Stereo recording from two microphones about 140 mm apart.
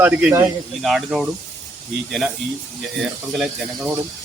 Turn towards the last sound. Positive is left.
turn(degrees=-5)  # may be behind; listen again after turning